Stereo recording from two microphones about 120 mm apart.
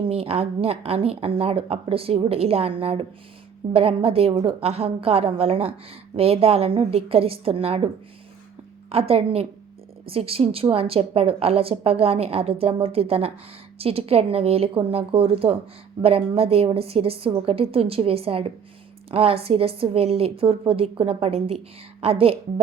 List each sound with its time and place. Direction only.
0.0 s a woman's voice: 55° right (ahead or behind)
8.9 s a woman's voice: 55° right (ahead or behind)